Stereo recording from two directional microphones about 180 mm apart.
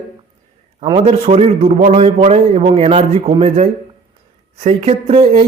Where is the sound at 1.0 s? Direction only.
35° right (ahead or behind).